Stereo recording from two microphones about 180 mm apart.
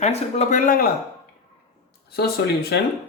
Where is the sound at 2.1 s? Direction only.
60° left (ahead or behind).